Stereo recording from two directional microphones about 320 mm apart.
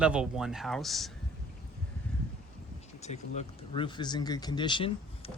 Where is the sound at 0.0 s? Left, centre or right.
Centre.